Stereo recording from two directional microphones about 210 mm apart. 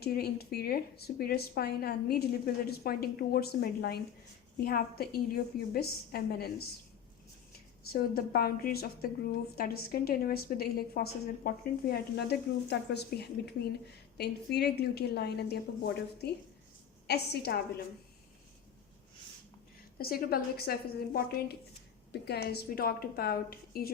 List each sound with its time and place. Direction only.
0.0 s a woman's voice: 50° left (ahead or behind)
7.9 s a woman's voice: 45° left (ahead or behind)
20.0 s a woman's voice: 45° left (ahead or behind)